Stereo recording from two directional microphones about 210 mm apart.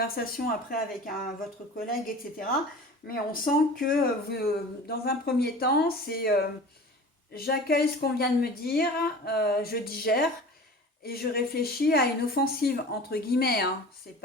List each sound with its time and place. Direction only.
0.0 s speech: 45° left (ahead or behind)
3.1 s speech: 45° left (ahead or behind)